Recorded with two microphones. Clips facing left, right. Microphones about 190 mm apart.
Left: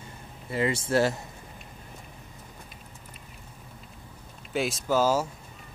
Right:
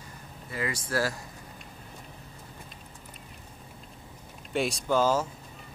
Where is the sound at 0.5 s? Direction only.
25° left (ahead or behind).